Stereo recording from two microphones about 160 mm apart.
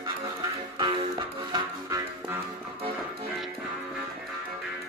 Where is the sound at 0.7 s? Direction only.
30° right (ahead or behind).